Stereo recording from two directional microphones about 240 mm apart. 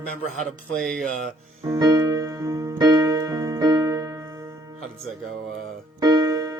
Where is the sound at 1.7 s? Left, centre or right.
Centre.